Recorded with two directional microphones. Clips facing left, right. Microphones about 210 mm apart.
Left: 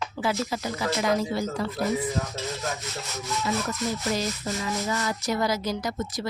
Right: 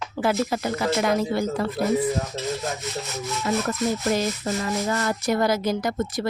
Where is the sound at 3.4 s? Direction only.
55° right (ahead or behind).